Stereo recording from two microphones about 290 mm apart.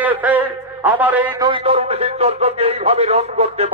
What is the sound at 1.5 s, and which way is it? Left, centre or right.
A man's voice, centre.